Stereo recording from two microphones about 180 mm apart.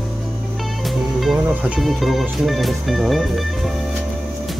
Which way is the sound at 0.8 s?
Centre (ahead or behind).